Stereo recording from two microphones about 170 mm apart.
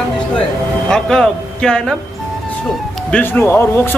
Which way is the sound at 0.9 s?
5° left (ahead or behind).